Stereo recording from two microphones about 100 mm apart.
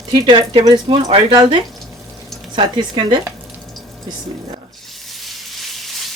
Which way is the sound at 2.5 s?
45° right (ahead or behind).